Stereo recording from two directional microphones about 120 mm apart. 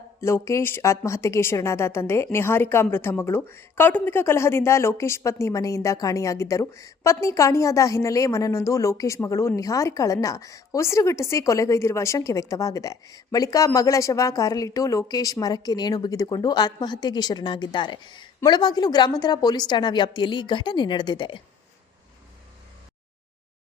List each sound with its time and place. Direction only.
0.2 s a woman's voice: 20° left (ahead or behind); by 21.4 s 40° left (ahead or behind)